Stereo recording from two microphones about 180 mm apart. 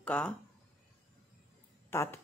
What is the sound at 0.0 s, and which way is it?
Speech, 5° left (ahead or behind).